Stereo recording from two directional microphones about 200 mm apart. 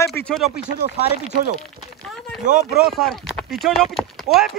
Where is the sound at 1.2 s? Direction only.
40° right (ahead or behind).